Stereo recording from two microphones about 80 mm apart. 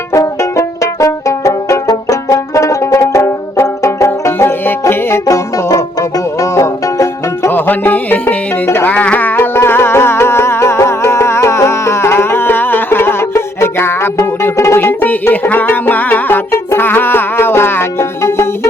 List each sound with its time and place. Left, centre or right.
0.1 s banjo: left
5.2 s music: left
7.5 s music: left